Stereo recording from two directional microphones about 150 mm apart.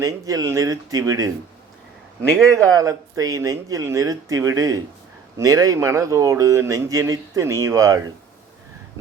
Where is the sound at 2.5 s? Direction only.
20° right (ahead or behind).